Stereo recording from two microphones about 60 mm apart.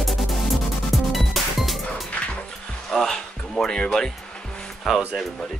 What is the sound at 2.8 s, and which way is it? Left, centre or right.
Music, centre.